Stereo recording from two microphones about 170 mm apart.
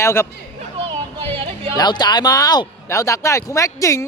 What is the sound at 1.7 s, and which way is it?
Speech, 25° left (ahead or behind).